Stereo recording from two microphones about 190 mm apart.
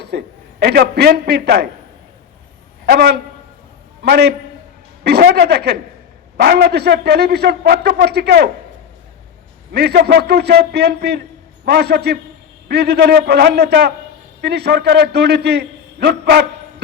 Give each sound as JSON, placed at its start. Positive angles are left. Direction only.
{"t": 0.0, "sound": "a man's voice", "side_deg": -60}
{"t": 2.9, "sound": "a man's voice", "side_deg": -60}
{"t": 9.7, "sound": "a man's voice", "side_deg": -60}